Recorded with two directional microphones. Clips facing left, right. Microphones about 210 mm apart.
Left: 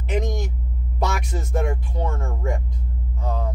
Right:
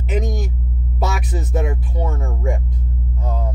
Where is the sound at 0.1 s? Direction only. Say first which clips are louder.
Right 2 dB; 5° right (ahead or behind).